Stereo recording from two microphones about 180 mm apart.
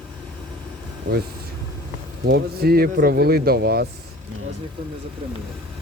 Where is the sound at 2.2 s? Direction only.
60° right (ahead or behind).